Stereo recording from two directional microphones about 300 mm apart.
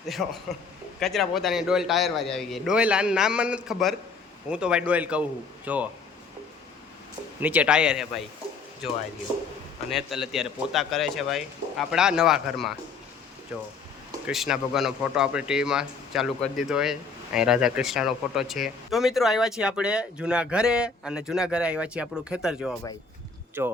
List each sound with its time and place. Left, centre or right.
0.0 s a man's voice: centre
7.4 s a man's voice: centre
9.9 s a man's voice: centre